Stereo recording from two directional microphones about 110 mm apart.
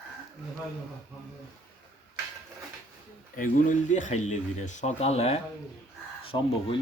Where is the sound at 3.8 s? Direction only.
90° left; by 5.4 s 75° left (ahead or behind).